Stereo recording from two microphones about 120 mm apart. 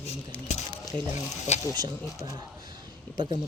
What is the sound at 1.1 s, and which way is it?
Speech, 70° left (ahead or behind).